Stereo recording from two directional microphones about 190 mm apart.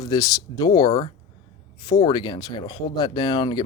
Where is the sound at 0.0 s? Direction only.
20° left (ahead or behind).